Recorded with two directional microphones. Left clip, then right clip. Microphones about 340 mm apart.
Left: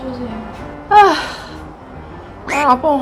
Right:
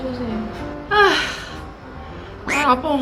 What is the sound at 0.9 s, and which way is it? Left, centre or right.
Music, centre.